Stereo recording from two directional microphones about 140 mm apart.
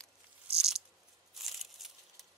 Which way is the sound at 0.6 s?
5° right (ahead or behind).